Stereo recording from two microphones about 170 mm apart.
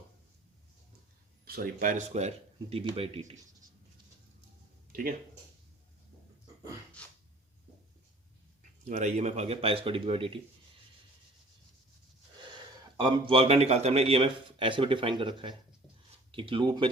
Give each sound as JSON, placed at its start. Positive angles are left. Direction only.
{"t": 1.5, "sound": "speech", "side_deg": -55}
{"t": 4.9, "sound": "speech", "side_deg": -55}
{"t": 7.0, "sound": "a sound", "side_deg": 5}
{"t": 8.9, "sound": "speech", "side_deg": -45}
{"t": 13.0, "sound": "speech", "side_deg": -30}